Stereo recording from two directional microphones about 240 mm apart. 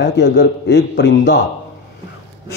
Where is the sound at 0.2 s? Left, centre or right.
Left.